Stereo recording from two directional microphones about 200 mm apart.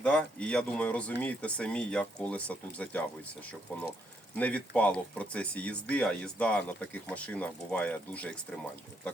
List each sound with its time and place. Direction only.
0.0 s speech: 5° left (ahead or behind)
4.4 s speech: 5° left (ahead or behind)